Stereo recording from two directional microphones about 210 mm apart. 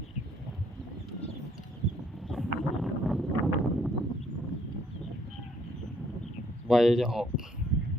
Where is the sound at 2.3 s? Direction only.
Centre (ahead or behind).